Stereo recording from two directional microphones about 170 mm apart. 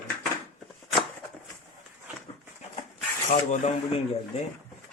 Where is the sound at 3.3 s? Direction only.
40° left (ahead or behind).